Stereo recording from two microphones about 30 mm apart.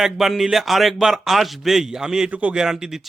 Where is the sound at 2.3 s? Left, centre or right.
Right.